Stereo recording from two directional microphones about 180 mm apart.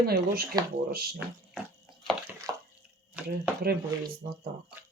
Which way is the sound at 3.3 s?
55° right (ahead or behind).